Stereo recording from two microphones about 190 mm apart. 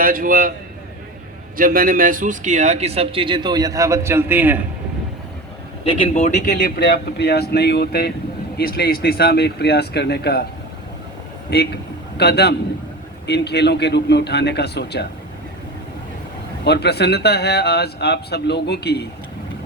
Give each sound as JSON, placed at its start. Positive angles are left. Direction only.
{"t": 0.0, "sound": "a man's voice", "side_deg": -45}
{"t": 1.5, "sound": "a man's voice", "side_deg": -50}
{"t": 6.0, "sound": "speech", "side_deg": 35}
{"t": 11.5, "sound": "a man's voice", "side_deg": 60}
{"t": 16.6, "sound": "speech", "side_deg": 60}